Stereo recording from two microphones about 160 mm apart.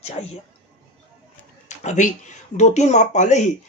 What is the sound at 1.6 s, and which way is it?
Speech, 50° left (ahead or behind).